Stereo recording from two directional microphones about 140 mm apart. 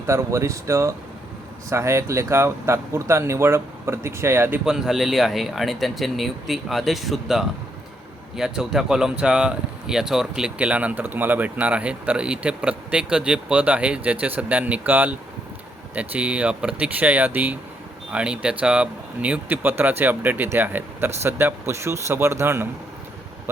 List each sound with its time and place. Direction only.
0.1 s speech: 20° right (ahead or behind)
4.6 s speech: 5° right (ahead or behind)